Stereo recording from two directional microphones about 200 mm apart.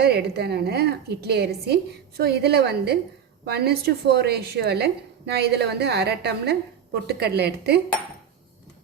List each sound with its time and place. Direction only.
0.0 s a woman's voice: 55° right (ahead or behind)